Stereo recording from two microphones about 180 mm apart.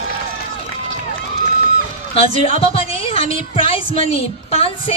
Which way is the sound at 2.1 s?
35° left (ahead or behind).